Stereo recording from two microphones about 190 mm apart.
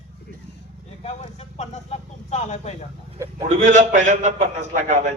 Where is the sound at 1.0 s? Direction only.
35° left (ahead or behind).